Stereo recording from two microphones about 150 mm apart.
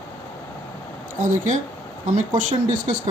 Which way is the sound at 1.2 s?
60° right (ahead or behind).